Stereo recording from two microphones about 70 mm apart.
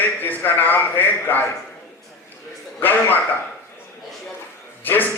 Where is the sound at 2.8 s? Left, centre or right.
Left.